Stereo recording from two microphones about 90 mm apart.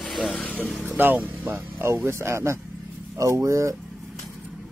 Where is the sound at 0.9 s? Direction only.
20° right (ahead or behind); by 3.7 s 35° right (ahead or behind).